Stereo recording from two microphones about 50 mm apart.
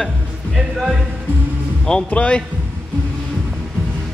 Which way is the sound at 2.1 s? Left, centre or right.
Left.